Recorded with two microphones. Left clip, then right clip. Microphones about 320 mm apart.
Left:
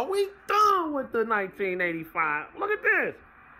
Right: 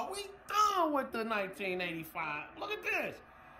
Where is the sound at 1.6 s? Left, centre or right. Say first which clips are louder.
Left 9 dB; centre.